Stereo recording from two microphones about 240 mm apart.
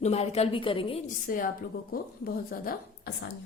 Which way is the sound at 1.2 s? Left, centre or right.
Left.